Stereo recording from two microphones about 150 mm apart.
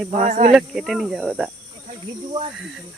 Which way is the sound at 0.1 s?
55° right (ahead or behind).